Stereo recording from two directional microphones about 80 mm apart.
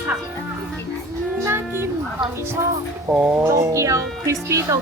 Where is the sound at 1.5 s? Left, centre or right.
Right.